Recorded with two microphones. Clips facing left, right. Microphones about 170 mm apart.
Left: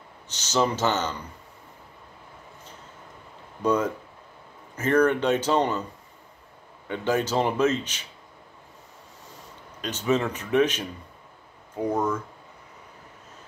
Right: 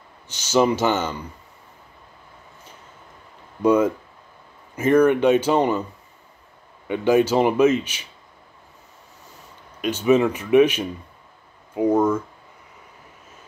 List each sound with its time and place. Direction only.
0.3 s speech: 10° right (ahead or behind)
3.6 s speech: 10° right (ahead or behind)
6.9 s speech: 15° right (ahead or behind)
9.8 s speech: 10° right (ahead or behind)